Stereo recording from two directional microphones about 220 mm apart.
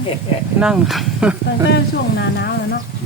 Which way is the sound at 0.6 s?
Centre (ahead or behind).